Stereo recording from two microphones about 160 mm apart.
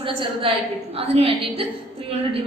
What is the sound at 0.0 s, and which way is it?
A woman's voice, 35° right (ahead or behind).